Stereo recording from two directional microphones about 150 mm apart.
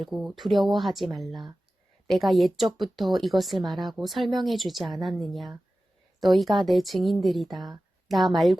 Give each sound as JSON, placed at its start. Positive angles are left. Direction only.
{"t": 0.0, "sound": "speech", "side_deg": 0}
{"t": 1.3, "sound": "speech", "side_deg": -30}
{"t": 2.0, "sound": "speech", "side_deg": 0}